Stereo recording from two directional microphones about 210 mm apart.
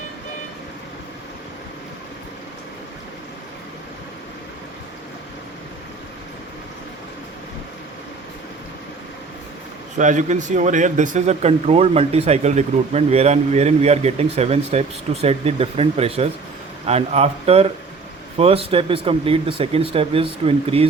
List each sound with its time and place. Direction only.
10.0 s speech: 35° right (ahead or behind)